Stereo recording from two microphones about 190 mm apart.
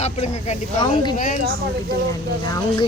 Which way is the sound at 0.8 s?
20° left (ahead or behind).